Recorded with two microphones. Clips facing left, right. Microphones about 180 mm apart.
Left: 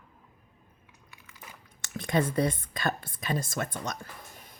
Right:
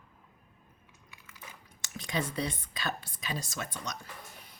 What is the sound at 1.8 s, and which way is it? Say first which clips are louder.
Speech: left 7 dB; 55° left (ahead or behind).